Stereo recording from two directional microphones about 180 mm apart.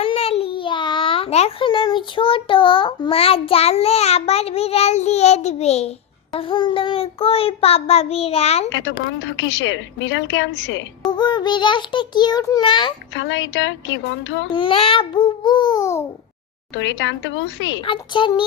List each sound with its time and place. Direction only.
0.0 s a child's voice: 30° left (ahead or behind)
6.3 s child singing: 30° left (ahead or behind)
8.7 s a woman's voice: 85° left
11.1 s a child's voice: 25° left (ahead or behind)
13.1 s a woman's voice: 90° left
14.5 s a child's voice: 30° left (ahead or behind)
16.7 s a woman's voice: 90° left
17.8 s a child's voice: 25° left (ahead or behind)